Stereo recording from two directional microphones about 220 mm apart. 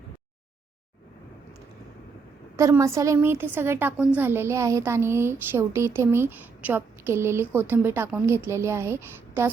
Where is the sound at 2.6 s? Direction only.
15° right (ahead or behind).